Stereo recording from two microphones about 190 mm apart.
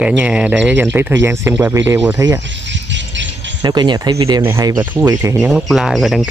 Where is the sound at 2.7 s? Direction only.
75° right (ahead or behind).